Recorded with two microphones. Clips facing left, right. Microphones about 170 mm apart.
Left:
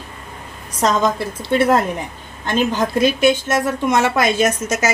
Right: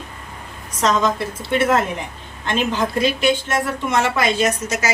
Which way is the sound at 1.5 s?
35° left (ahead or behind).